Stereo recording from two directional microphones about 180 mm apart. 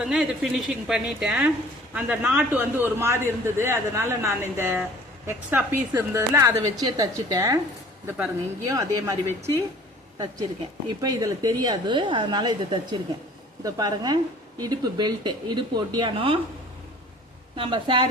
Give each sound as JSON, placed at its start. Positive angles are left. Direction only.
{"t": 0.0, "sound": "a woman's voice", "side_deg": -5}
{"t": 11.0, "sound": "speech", "side_deg": -20}
{"t": 17.6, "sound": "speech", "side_deg": -25}